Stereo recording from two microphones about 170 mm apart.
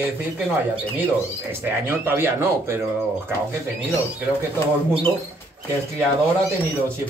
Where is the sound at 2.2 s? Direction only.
15° right (ahead or behind).